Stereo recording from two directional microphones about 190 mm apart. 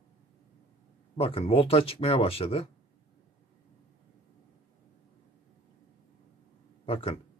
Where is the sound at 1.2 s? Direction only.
30° left (ahead or behind).